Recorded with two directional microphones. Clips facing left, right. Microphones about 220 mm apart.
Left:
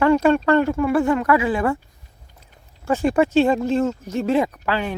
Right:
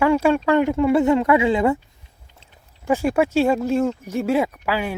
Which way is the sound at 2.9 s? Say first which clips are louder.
Left 1 dB; 10° right (ahead or behind).